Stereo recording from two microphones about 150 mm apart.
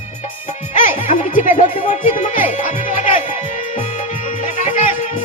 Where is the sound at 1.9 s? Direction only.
55° left (ahead or behind).